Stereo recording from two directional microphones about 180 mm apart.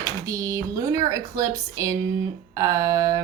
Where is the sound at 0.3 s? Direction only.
15° right (ahead or behind).